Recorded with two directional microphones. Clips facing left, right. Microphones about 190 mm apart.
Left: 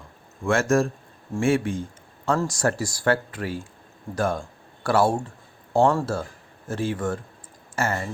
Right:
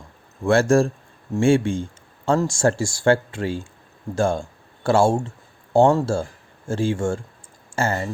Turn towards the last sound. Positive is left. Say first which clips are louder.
# right 3 dB
turn(degrees=-30)  # may be behind; listen again after turning